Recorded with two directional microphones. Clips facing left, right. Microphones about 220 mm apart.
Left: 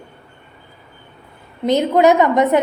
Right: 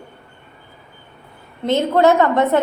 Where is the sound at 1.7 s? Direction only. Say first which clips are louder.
Left 1 dB; 15° left (ahead or behind).